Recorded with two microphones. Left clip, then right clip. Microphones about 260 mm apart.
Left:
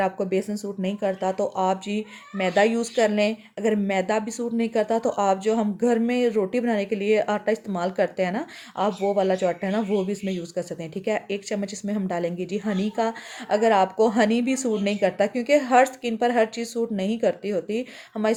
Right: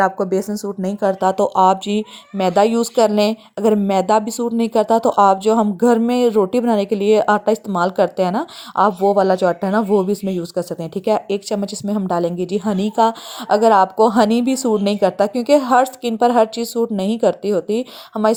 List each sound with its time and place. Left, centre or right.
0.3 s speech: centre
0.6 s speech: centre